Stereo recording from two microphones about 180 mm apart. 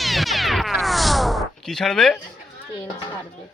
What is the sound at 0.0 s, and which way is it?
Music, centre (ahead or behind).